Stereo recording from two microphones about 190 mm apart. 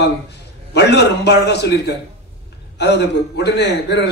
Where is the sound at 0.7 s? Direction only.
65° left (ahead or behind).